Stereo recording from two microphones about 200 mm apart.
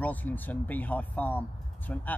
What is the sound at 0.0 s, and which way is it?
Speech, 10° left (ahead or behind).